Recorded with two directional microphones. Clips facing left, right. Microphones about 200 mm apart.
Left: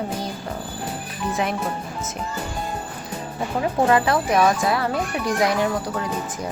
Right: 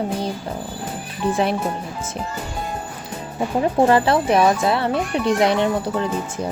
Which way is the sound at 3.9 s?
30° right (ahead or behind).